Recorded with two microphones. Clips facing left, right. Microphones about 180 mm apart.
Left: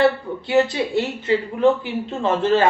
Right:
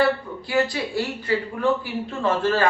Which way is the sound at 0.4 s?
25° left (ahead or behind).